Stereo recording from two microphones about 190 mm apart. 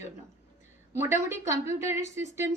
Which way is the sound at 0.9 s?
15° right (ahead or behind).